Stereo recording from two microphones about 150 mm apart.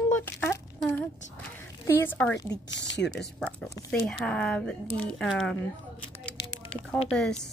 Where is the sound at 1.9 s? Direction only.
15° left (ahead or behind).